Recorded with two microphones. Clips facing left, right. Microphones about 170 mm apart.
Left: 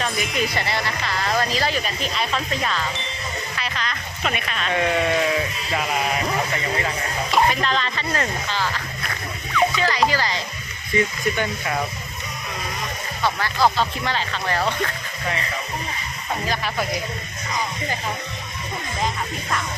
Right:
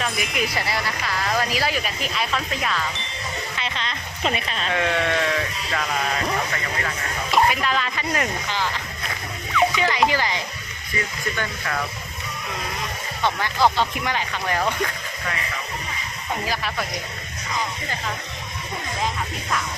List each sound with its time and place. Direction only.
0.0 s speech: centre (ahead or behind)
3.6 s speech: 25° right (ahead or behind)
4.7 s speech: 5° left (ahead or behind)
7.3 s speech: 5° right (ahead or behind)
10.9 s speech: 20° left (ahead or behind)
13.4 s speech: 15° right (ahead or behind)
16.5 s speech: centre (ahead or behind)